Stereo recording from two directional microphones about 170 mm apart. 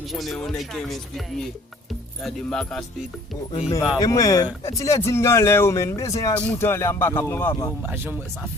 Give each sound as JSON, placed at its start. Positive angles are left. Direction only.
{"t": 0.1, "sound": "speech", "side_deg": 0}
{"t": 3.9, "sound": "speech", "side_deg": 20}
{"t": 7.8, "sound": "speech", "side_deg": -10}